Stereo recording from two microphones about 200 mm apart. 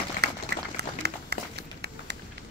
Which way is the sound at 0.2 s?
55° right (ahead or behind).